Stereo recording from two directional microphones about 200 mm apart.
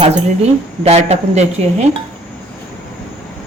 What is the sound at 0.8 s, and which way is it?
A woman's voice, 35° right (ahead or behind).